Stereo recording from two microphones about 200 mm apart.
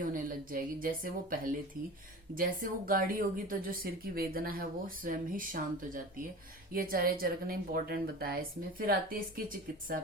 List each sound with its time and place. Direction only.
0.0 s a woman's voice: 45° right (ahead or behind)